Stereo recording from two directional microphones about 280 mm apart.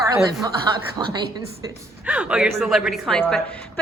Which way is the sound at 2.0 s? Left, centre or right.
Centre.